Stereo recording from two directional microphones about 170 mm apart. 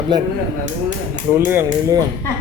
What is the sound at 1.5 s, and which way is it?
Speech, 15° right (ahead or behind).